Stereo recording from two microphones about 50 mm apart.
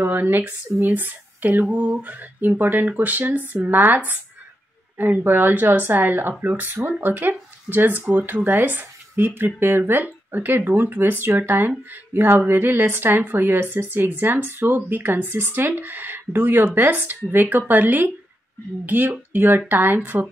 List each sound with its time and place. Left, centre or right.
0.0 s speech: right